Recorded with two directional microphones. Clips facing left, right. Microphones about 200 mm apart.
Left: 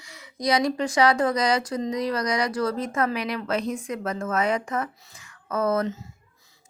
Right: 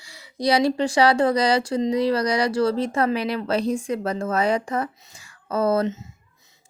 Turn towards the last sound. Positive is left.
turn(degrees=-30)  # may be behind; listen again after turning